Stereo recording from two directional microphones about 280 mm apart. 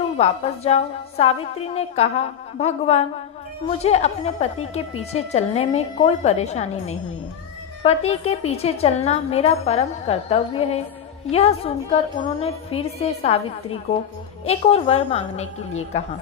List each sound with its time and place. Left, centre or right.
0.2 s a woman's voice: left